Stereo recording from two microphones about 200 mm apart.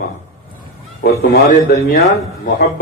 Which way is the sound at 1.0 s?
45° left (ahead or behind).